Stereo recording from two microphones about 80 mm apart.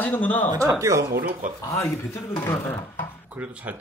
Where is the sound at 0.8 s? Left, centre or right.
Right.